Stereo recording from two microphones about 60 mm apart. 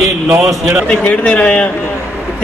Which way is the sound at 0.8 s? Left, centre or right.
Left.